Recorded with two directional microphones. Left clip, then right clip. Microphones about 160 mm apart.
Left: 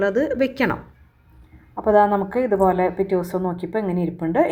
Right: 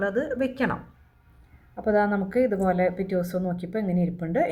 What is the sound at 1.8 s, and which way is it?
Speech, 5° left (ahead or behind).